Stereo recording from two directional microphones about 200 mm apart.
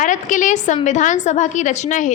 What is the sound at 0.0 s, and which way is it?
A woman's voice, 40° left (ahead or behind).